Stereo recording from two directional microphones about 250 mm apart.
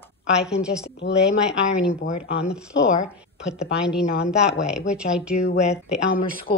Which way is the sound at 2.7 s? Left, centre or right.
Left.